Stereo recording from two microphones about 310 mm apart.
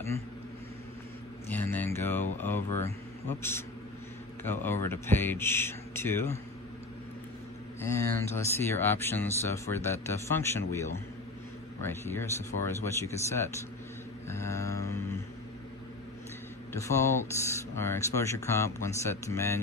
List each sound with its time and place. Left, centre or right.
1.5 s speech: centre
4.5 s speech: centre
7.8 s speech: centre
14.2 s mantra: centre
17.4 s speech: centre